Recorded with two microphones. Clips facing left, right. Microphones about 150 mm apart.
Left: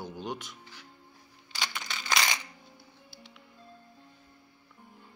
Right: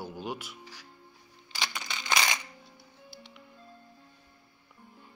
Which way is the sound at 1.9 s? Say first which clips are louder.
Right 1 dB; 20° right (ahead or behind).